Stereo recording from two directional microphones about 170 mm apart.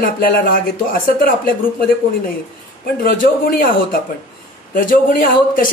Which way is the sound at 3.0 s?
55° left (ahead or behind).